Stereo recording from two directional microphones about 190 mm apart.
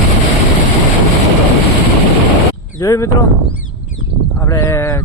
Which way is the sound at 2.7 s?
15° left (ahead or behind).